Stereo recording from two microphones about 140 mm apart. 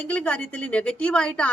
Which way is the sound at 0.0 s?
10° left (ahead or behind).